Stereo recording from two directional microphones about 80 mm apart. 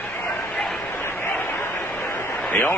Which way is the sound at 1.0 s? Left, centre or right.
Left.